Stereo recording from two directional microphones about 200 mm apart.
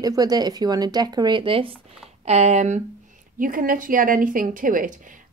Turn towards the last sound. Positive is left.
turn(degrees=-40)  # may be behind; listen again after turning